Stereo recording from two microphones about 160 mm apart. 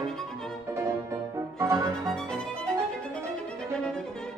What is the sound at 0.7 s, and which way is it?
Music, 15° right (ahead or behind).